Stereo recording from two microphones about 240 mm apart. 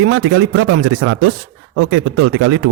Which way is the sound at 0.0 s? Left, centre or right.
Right.